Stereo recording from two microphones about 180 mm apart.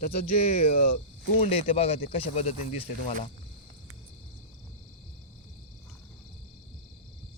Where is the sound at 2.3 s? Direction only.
35° left (ahead or behind).